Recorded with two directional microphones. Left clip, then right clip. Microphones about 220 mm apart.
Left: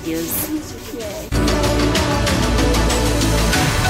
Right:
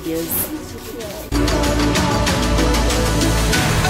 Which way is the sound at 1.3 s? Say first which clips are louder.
Even; centre (ahead or behind).